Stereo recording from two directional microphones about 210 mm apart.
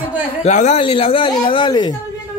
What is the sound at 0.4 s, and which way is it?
Speech, 35° left (ahead or behind).